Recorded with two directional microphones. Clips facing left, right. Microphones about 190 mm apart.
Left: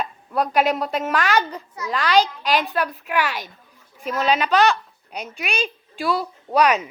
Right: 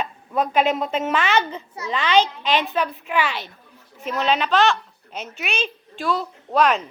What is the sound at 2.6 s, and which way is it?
A woman's voice, 5° left (ahead or behind).